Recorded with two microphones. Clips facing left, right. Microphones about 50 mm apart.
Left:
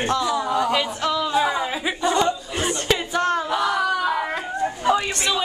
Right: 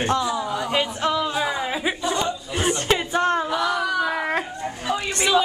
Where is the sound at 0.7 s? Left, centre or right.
Centre.